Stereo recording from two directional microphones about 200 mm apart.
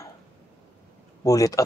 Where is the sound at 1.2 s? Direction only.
15° left (ahead or behind).